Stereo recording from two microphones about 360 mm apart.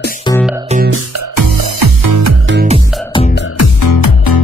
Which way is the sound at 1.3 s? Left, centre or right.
Right.